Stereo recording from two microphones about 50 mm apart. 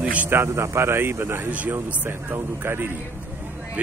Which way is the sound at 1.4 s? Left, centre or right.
Right.